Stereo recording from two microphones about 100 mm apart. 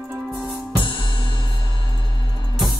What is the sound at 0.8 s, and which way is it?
Music, 55° left (ahead or behind).